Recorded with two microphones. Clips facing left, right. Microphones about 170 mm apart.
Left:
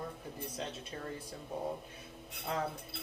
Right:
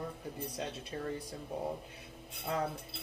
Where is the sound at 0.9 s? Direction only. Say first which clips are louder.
Right 5 dB; 35° right (ahead or behind).